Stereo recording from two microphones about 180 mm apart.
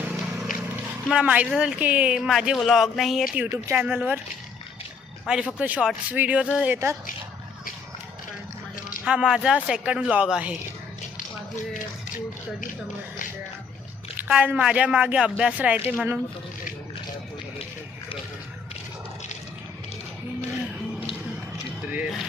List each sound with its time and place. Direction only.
0.0 s run: 5° right (ahead or behind)
1.0 s speech: 5° right (ahead or behind)
5.2 s speech: 5° right (ahead or behind)
9.0 s speech: 5° right (ahead or behind)
11.5 s speech: 45° left (ahead or behind)
14.2 s speech: 5° right (ahead or behind)
21.8 s music: 10° right (ahead or behind)